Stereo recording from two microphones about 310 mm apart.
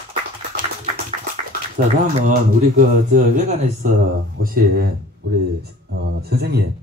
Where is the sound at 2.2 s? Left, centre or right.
Right.